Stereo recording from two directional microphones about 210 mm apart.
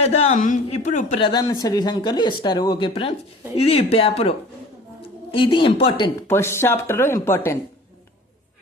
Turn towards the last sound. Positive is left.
turn(degrees=10)  # may be behind; listen again after turning